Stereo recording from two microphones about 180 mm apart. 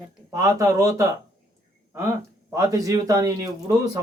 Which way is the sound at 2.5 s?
20° right (ahead or behind).